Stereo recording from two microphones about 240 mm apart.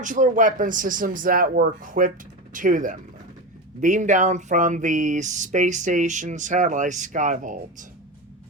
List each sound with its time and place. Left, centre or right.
0.0 s speech: right